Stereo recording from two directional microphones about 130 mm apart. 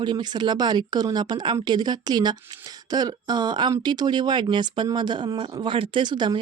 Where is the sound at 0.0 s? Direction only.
35° right (ahead or behind).